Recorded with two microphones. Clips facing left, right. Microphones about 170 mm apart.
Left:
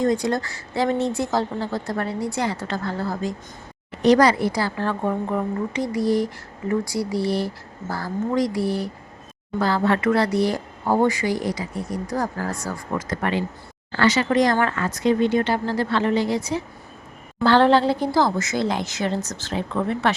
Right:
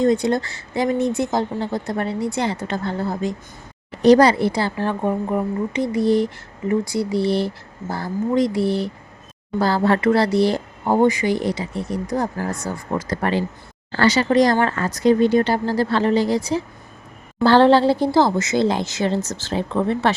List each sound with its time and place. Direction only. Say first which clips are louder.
0.0 s speech: right 3 dB; 25° right (ahead or behind)
4.0 s speech: right 3 dB; 30° right (ahead or behind)
4.8 s speech: right 2 dB; 15° right (ahead or behind)
9.6 s speech: right 2 dB; 35° right (ahead or behind)